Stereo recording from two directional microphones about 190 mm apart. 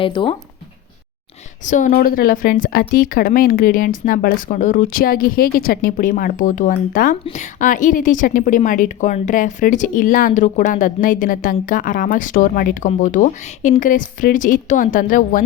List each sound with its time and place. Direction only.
0.0 s speech: 25° left (ahead or behind)
1.6 s a woman's voice: 40° left (ahead or behind)